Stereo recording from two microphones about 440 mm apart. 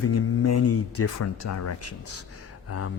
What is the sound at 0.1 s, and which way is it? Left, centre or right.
Speech, left.